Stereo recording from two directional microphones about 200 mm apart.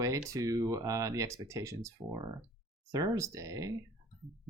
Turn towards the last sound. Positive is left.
turn(degrees=-15)  # may be behind; listen again after turning